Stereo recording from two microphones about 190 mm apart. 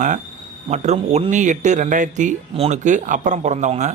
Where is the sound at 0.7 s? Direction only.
35° right (ahead or behind).